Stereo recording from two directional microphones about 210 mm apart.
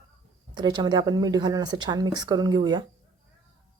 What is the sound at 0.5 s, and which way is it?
Speech, 20° right (ahead or behind).